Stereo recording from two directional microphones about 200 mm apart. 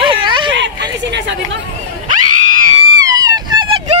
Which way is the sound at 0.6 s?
60° right (ahead or behind).